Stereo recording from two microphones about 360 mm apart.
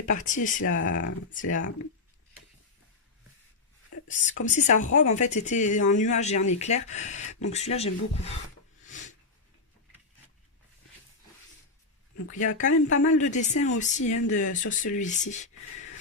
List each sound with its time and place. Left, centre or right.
0.0 s speech: left
0.6 s speech: left
1.0 s speech: left
4.1 s speech: centre
7.2 s speech: left
7.4 s speech: centre
8.9 s snort: left
12.3 s speech: left